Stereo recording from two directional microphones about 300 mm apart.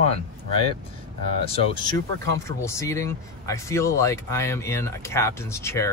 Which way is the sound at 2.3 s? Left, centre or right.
Centre.